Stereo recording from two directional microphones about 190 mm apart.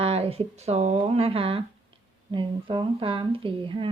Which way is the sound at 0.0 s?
30° right (ahead or behind).